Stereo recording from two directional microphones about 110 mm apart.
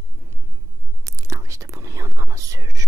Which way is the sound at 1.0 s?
30° right (ahead or behind).